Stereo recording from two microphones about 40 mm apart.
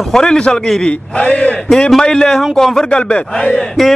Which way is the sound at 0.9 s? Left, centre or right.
Left.